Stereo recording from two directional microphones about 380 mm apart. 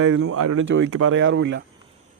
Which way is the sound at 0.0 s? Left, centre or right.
Right.